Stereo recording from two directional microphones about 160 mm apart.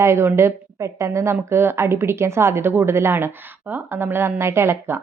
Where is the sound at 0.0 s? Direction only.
15° right (ahead or behind).